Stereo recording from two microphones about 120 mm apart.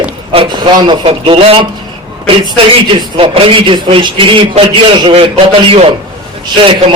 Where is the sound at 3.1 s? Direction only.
50° right (ahead or behind).